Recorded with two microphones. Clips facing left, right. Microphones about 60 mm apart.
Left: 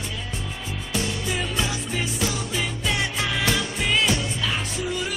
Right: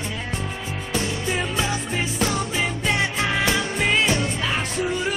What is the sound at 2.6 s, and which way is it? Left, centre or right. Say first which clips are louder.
Music: right 2 dB; right.